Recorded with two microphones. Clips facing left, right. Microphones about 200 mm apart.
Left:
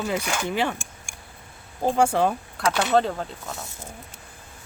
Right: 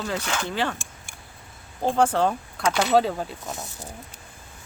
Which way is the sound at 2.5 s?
5° right (ahead or behind).